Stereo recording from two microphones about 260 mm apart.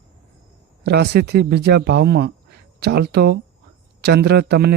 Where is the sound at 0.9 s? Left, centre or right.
Right.